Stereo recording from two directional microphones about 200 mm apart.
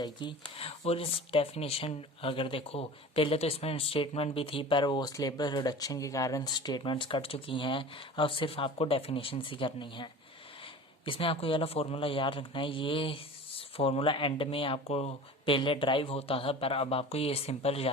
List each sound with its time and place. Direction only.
0.0 s speech: 25° left (ahead or behind)